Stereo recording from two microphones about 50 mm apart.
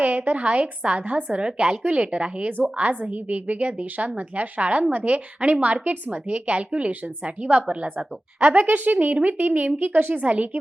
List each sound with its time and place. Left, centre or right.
0.0 s a woman's voice: right
9.7 s a woman's voice: right
10.2 s a woman's voice: right